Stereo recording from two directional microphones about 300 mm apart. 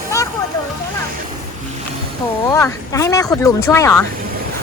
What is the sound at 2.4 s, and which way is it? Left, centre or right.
Speech, centre.